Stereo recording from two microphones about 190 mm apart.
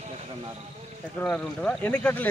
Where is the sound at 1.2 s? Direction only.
5° left (ahead or behind).